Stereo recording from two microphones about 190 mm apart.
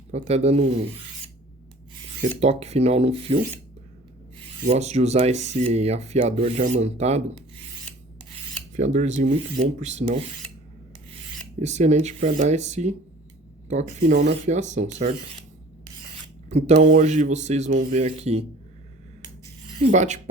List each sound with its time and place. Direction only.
0.1 s speech: 35° right (ahead or behind)
2.4 s speech: 35° right (ahead or behind)
4.6 s speech: 35° right (ahead or behind)
8.7 s speech: 40° right (ahead or behind)
11.6 s speech: 35° right (ahead or behind)
16.5 s speech: 35° right (ahead or behind)
19.9 s speech: 40° right (ahead or behind)